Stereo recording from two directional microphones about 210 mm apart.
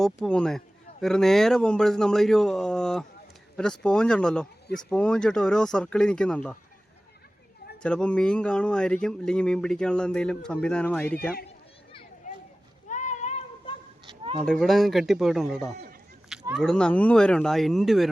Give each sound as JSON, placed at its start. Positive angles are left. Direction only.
{"t": 0.0, "sound": "speech", "side_deg": 5}
{"t": 7.8, "sound": "speech", "side_deg": 5}
{"t": 12.9, "sound": "a sound", "side_deg": 35}
{"t": 14.4, "sound": "speech", "side_deg": 0}